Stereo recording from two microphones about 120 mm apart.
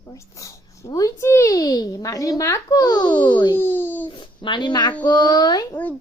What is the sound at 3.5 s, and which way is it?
Child singing, 15° left (ahead or behind).